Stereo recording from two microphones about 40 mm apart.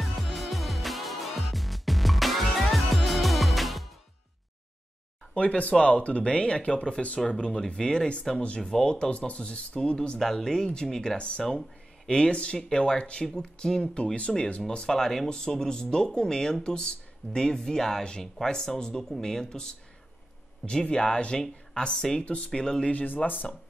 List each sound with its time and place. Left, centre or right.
0.0 s music: centre
5.3 s speech: left
10.1 s speech: centre; by 12.5 s left
12.5 s speech: centre
13.3 s speech: centre
22.2 s speech: left
22.5 s speech: centre
22.8 s speech: left